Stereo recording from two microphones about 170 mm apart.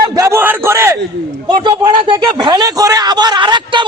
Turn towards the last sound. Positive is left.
turn(degrees=-25)  # may be behind; listen again after turning